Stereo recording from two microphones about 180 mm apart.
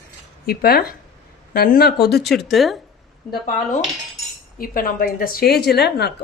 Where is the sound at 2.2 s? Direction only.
Centre (ahead or behind).